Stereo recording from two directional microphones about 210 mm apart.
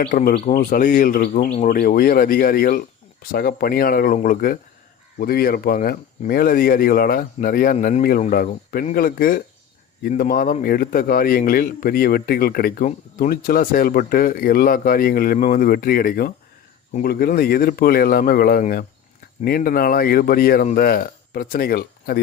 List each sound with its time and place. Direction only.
0.0 s a man's voice: 40° left (ahead or behind)